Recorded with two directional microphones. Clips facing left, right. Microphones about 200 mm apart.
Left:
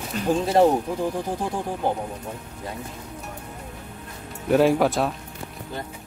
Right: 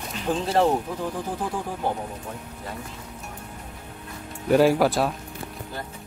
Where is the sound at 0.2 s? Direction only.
45° left (ahead or behind).